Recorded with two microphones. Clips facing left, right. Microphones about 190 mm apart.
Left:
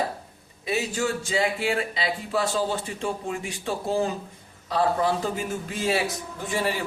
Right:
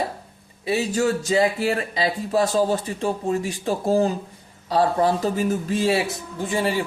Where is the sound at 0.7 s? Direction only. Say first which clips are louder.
Right 5 dB; 35° right (ahead or behind).